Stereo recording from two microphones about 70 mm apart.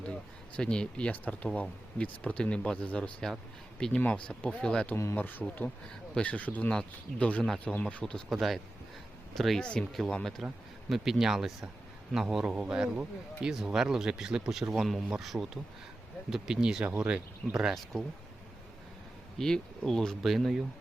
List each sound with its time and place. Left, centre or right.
0.0 s speech: centre
5.1 s speech: left
8.3 s speech: centre
9.6 s a man's voice: centre
19.4 s speech: centre